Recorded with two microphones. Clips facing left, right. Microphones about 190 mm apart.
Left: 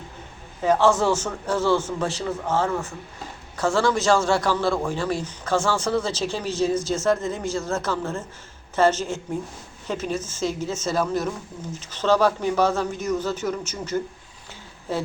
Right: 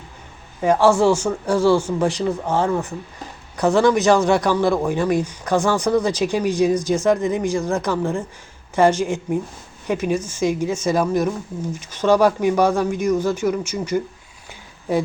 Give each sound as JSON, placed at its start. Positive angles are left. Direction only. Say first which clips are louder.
{"t": 0.6, "sound": "a man's voice", "louder": "right 4 dB", "side_deg": -10}